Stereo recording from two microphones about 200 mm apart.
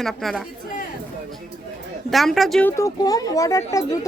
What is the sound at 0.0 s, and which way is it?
Speech, centre (ahead or behind).